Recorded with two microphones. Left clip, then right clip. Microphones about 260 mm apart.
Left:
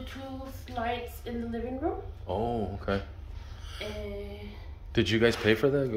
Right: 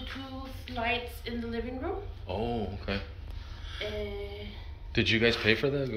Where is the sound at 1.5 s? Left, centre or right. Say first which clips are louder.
Left 3 dB; left.